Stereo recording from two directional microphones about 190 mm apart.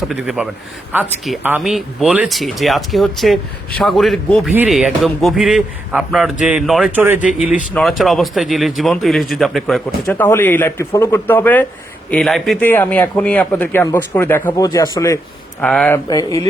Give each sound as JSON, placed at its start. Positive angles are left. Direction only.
{"t": 0.1, "sound": "a man's voice", "side_deg": -5}
{"t": 16.0, "sound": "speech", "side_deg": 20}